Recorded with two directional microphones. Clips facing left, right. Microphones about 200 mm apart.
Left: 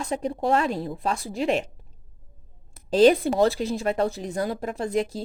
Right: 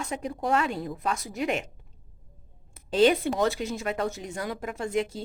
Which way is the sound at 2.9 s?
35° left (ahead or behind).